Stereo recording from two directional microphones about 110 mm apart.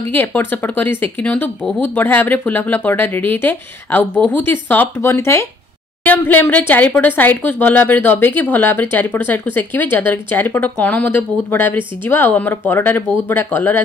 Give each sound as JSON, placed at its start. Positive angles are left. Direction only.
{"t": 0.1, "sound": "speech", "side_deg": 15}